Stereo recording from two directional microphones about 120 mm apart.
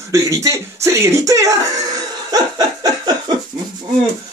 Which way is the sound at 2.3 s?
35° right (ahead or behind).